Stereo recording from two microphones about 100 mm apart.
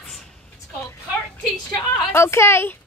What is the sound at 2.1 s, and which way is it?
Speech, 25° left (ahead or behind).